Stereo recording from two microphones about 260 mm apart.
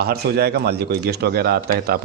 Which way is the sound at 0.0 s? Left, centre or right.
Right.